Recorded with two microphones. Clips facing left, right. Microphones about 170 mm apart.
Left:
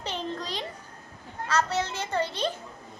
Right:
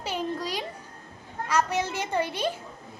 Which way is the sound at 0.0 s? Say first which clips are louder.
Right 3 dB; 10° right (ahead or behind).